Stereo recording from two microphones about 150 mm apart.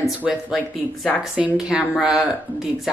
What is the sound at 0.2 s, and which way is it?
Speech, 5° right (ahead or behind).